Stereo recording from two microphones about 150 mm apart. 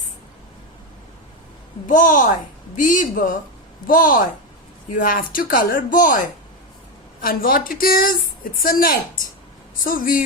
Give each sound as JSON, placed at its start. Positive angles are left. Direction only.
{"t": 1.9, "sound": "speech", "side_deg": 60}
{"t": 7.2, "sound": "speech", "side_deg": 70}